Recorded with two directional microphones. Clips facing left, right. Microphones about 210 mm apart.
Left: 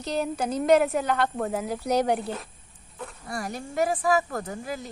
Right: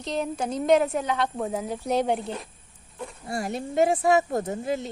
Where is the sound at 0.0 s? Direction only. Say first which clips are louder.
Left 1 dB; 5° left (ahead or behind).